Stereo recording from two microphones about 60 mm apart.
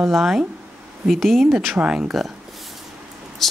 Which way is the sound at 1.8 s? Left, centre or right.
Centre.